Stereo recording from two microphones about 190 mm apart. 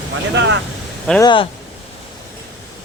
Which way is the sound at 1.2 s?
25° left (ahead or behind).